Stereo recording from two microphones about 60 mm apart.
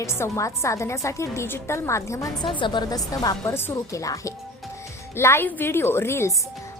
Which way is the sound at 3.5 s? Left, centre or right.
Left.